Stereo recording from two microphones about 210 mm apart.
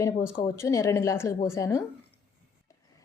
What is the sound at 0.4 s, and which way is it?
A woman's voice, 15° left (ahead or behind).